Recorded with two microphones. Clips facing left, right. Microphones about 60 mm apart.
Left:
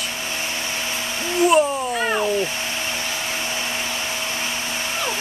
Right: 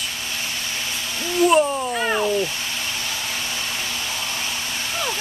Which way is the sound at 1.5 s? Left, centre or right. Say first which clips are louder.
Even; centre.